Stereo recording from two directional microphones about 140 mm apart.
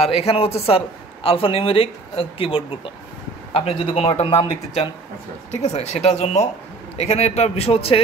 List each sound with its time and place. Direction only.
0.0 s a man's voice: 45° left (ahead or behind)